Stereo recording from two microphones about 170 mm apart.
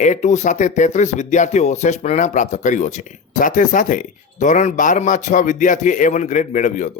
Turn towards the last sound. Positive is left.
turn(degrees=50)  # may be behind; listen again after turning